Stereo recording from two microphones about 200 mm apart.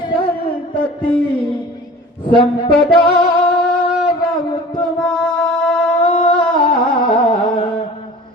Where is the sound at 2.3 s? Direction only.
25° left (ahead or behind).